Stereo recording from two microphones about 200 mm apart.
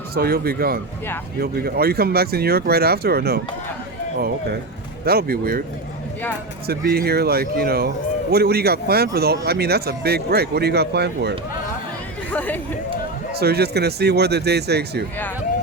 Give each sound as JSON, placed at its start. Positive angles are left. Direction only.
{"t": 0.1, "sound": "speech", "side_deg": -50}
{"t": 5.0, "sound": "speech", "side_deg": -50}
{"t": 6.7, "sound": "speech", "side_deg": -50}
{"t": 12.3, "sound": "speech", "side_deg": 10}
{"t": 13.4, "sound": "speech", "side_deg": -55}